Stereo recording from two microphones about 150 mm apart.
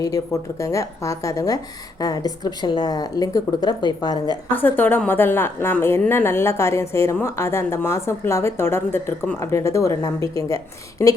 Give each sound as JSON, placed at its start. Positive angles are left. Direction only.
{"t": 0.6, "sound": "a woman's voice", "side_deg": 20}
{"t": 4.5, "sound": "a woman's voice", "side_deg": 10}